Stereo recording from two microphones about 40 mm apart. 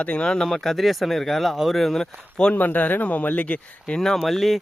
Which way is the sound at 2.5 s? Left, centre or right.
Left.